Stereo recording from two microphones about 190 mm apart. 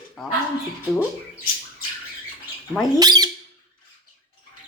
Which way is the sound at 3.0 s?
20° right (ahead or behind).